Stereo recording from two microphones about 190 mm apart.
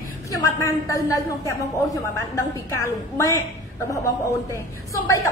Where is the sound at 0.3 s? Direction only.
15° left (ahead or behind).